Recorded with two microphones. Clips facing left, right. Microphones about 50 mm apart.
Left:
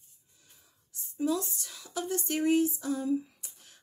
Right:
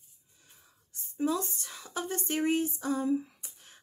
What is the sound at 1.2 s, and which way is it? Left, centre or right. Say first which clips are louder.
Speech: even; right.